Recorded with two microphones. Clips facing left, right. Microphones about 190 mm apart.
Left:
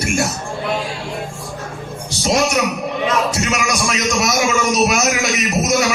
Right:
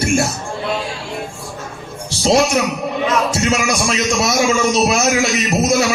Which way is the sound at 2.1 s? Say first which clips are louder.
Right 3 dB; 30° right (ahead or behind).